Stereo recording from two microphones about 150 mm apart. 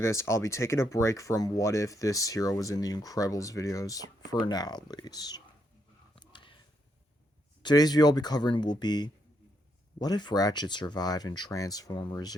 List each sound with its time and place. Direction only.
0.0 s speech: 20° left (ahead or behind)
6.1 s a sound: 35° left (ahead or behind)
7.6 s speech: 25° left (ahead or behind)